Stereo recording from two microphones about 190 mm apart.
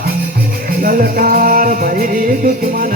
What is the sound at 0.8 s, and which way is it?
Music, 50° right (ahead or behind).